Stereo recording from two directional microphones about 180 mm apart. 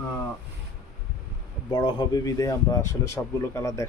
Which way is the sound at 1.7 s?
25° left (ahead or behind).